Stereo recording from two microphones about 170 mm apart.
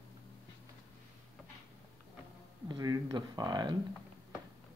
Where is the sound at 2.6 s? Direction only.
25° right (ahead or behind).